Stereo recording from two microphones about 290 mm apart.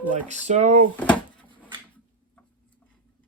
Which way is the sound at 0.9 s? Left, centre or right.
Centre.